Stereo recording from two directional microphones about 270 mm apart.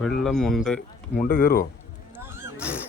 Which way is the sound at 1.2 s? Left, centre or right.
Left.